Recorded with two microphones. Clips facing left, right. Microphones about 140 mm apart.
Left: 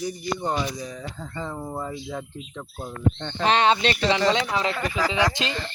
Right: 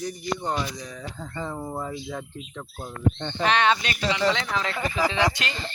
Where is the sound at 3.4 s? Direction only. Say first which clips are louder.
Left 2 dB; 30° left (ahead or behind).